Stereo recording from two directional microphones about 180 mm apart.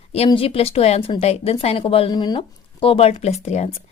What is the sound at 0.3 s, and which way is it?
A woman's voice, 30° left (ahead or behind).